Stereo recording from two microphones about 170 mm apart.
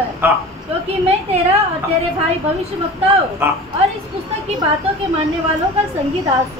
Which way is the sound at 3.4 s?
15° right (ahead or behind).